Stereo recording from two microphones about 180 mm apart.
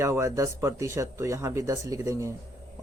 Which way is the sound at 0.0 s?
15° right (ahead or behind).